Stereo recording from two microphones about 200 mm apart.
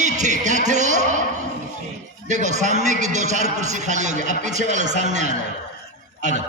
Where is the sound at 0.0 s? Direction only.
35° right (ahead or behind).